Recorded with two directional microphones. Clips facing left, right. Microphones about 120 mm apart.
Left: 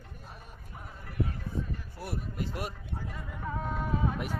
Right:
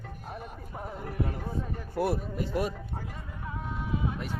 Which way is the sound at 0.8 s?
65° right (ahead or behind).